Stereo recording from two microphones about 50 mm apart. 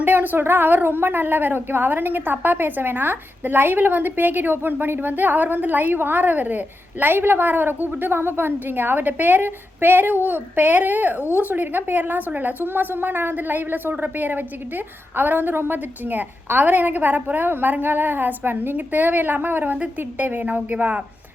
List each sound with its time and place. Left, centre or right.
0.0 s a woman's voice: right